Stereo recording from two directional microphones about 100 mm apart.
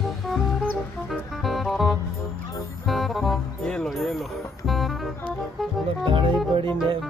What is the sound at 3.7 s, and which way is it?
Speech, 5° left (ahead or behind).